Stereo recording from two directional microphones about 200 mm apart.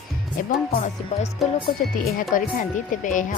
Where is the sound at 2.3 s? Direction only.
40° left (ahead or behind).